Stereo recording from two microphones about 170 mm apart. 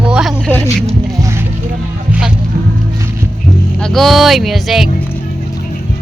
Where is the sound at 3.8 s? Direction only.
5° left (ahead or behind).